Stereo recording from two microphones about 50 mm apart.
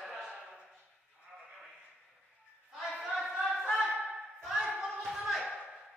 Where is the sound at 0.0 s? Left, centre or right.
Centre.